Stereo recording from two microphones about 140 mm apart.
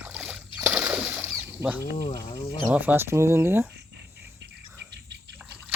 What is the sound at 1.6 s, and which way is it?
Speech, 20° right (ahead or behind).